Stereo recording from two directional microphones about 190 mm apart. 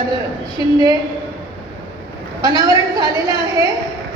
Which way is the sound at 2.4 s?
20° right (ahead or behind).